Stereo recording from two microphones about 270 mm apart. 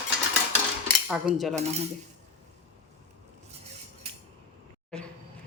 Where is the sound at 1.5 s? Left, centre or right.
Right.